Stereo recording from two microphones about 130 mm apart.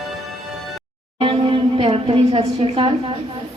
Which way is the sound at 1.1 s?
40° right (ahead or behind).